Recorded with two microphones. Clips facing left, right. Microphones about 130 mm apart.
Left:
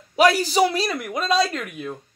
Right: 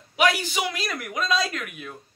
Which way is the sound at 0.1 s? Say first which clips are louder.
Left 5 dB; 35° left (ahead or behind).